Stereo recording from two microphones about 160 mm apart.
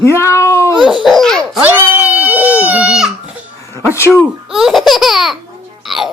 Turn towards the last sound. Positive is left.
turn(degrees=0)  # may be behind; listen again after turning